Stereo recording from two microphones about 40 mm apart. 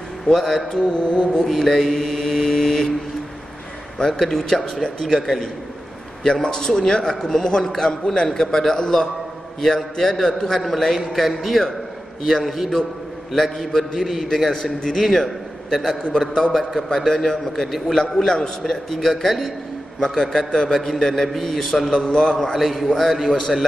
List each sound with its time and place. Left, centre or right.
0.4 s mantra: centre
0.8 s mantra: left
1.4 s a man's voice: centre
4.1 s a man's voice: centre
6.2 s a man's voice: centre
14.5 s a man's voice: centre
15.0 s a man's voice: centre
20.0 s a man's voice: centre
21.9 s mantra: centre
22.4 s a man's voice: centre